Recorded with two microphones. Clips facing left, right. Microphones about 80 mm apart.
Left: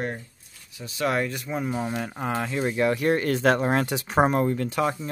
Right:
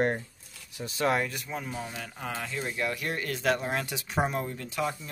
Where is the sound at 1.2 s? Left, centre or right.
Centre.